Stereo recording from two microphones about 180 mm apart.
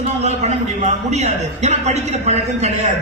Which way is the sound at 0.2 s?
40° right (ahead or behind).